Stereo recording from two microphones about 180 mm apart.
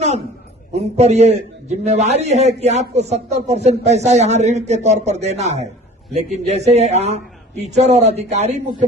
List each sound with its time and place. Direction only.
0.7 s a man's voice: 40° right (ahead or behind)